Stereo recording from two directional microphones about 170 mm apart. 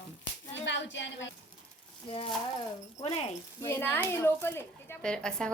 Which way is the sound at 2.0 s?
35° left (ahead or behind).